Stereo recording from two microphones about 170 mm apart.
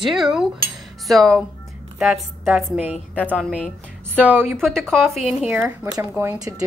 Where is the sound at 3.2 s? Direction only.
5° left (ahead or behind).